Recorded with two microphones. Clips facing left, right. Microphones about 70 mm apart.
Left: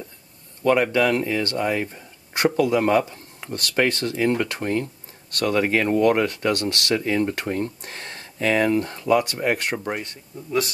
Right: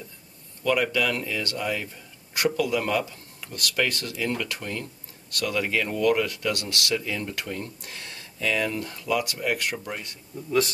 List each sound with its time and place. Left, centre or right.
0.8 s speech: left
10.3 s a man's voice: centre